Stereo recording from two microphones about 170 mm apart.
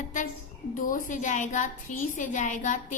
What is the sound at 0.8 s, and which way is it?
A woman's voice, 50° left (ahead or behind).